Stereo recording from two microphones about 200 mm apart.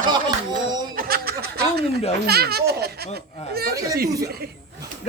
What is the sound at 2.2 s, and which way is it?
Speech, 50° right (ahead or behind).